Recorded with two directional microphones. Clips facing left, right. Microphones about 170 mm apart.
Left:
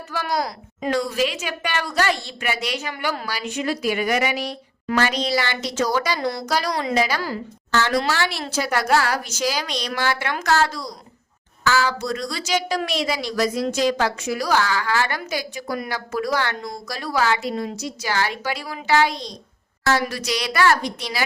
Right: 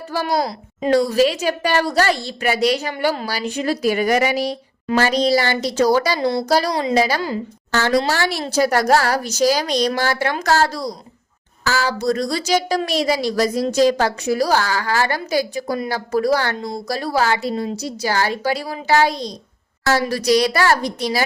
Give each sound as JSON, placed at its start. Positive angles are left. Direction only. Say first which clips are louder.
{"t": 0.1, "sound": "a woman's voice", "louder": "right 4 dB", "side_deg": -30}